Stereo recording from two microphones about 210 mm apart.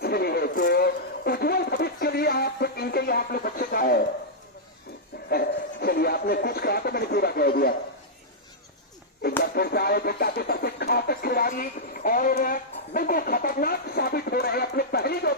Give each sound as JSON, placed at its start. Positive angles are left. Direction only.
{"t": 0.0, "sound": "a sound", "side_deg": 50}
{"t": 5.3, "sound": "speech", "side_deg": 50}
{"t": 9.4, "sound": "speech", "side_deg": 50}